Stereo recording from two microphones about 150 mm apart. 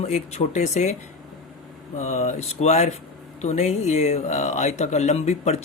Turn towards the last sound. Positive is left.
turn(degrees=45)  # may be behind; listen again after turning